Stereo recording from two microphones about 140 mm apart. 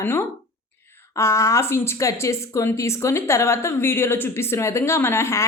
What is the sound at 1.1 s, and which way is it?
Speech, 20° left (ahead or behind).